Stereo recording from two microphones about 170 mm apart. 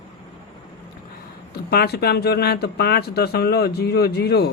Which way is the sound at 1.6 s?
70° left (ahead or behind).